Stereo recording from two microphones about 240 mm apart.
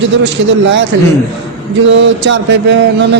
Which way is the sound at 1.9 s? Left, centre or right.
Right.